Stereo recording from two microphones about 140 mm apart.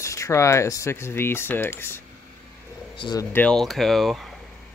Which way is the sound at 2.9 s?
35° left (ahead or behind).